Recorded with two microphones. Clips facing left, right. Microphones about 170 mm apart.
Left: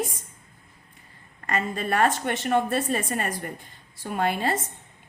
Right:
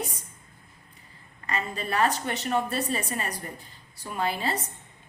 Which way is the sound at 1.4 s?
50° left (ahead or behind).